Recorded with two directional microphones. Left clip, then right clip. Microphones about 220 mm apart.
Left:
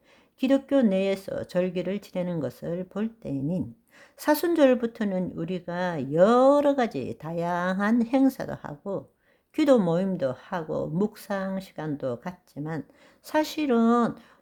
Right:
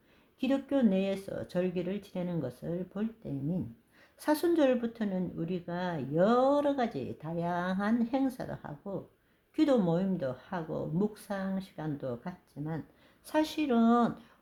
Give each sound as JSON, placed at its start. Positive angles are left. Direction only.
{"t": 0.3, "sound": "speech", "side_deg": 35}